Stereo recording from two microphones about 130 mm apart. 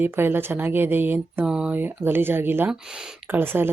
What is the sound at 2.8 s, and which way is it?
Speech, 5° right (ahead or behind).